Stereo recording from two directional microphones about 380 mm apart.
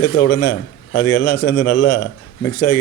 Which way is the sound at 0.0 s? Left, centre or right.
Left.